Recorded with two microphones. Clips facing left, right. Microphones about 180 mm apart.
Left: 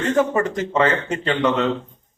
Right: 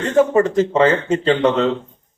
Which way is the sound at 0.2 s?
30° right (ahead or behind).